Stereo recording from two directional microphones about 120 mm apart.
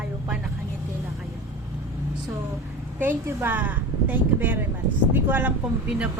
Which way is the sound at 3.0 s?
15° right (ahead or behind).